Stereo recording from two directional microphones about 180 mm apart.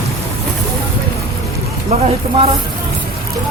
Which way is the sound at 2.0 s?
35° right (ahead or behind).